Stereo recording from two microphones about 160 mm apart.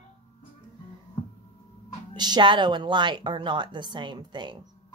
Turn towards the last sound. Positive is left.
turn(degrees=-30)  # may be behind; listen again after turning